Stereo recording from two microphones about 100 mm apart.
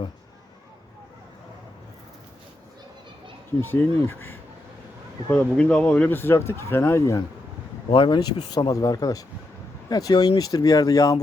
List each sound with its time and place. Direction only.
3.6 s speech: 20° left (ahead or behind)
7.9 s speech: 50° left (ahead or behind); by 11.2 s 35° left (ahead or behind)